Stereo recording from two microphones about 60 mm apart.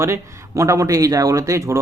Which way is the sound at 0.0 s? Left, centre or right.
Right.